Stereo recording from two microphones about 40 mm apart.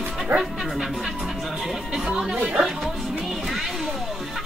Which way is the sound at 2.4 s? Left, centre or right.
Right.